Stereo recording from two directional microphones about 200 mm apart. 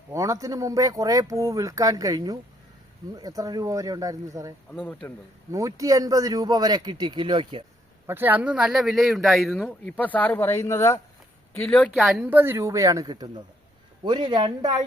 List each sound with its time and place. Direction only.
0.1 s speech: 15° right (ahead or behind)
4.7 s speech: 5° left (ahead or behind)
5.5 s speech: 15° right (ahead or behind)
8.0 s speech: 10° right (ahead or behind)
12.1 s speech: 10° right (ahead or behind)